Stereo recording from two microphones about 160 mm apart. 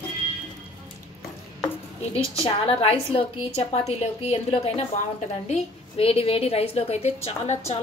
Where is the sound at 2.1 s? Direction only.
35° left (ahead or behind).